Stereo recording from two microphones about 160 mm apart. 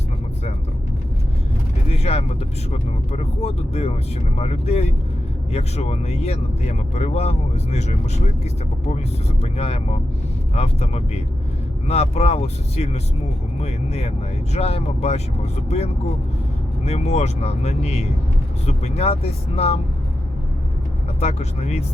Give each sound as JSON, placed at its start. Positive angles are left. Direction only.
{"t": 1.9, "sound": "vehicle", "side_deg": 40}
{"t": 2.7, "sound": "speech", "side_deg": 45}
{"t": 9.4, "sound": "speech", "side_deg": 40}
{"t": 21.2, "sound": "speech", "side_deg": 45}